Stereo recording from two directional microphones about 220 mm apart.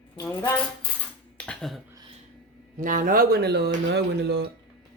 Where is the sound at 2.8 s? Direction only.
35° right (ahead or behind).